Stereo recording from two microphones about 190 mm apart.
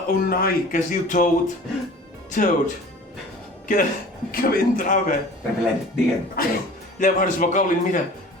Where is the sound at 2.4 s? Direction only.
45° left (ahead or behind).